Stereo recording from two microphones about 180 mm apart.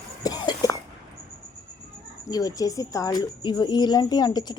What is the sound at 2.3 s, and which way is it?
Speech, 20° left (ahead or behind).